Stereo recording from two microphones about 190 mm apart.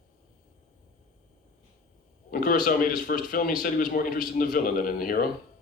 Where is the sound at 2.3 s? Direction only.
45° left (ahead or behind).